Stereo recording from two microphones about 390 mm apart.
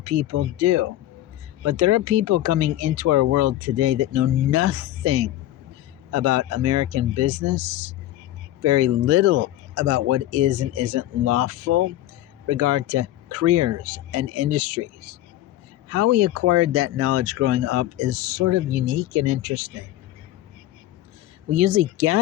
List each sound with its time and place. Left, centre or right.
0.0 s speech: right
8.6 s speech: right
15.9 s speech: right
21.5 s speech: right